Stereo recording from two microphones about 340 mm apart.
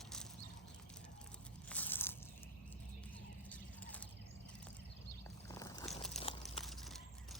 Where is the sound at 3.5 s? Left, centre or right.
Centre.